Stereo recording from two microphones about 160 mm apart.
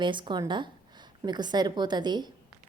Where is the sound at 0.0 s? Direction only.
30° right (ahead or behind).